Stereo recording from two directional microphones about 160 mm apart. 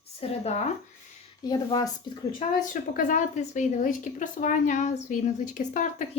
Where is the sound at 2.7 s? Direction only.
55° left (ahead or behind).